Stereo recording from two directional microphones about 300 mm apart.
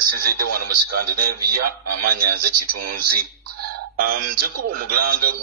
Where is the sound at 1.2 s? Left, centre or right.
Right.